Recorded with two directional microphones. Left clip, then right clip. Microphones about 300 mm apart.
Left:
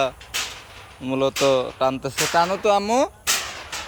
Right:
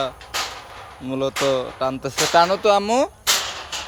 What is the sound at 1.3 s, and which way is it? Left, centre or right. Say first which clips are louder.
Speech: left 1 dB; centre.